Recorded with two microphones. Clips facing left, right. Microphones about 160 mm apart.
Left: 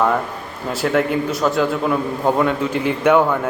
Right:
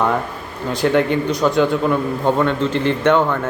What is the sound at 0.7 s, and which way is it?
A man's voice, 5° left (ahead or behind).